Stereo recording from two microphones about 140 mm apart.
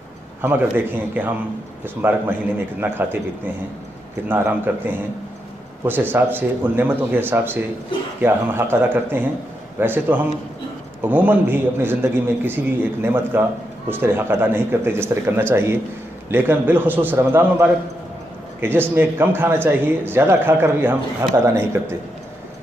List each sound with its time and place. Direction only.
0.4 s a man's voice: 15° right (ahead or behind)
4.3 s a man's voice: 15° right (ahead or behind)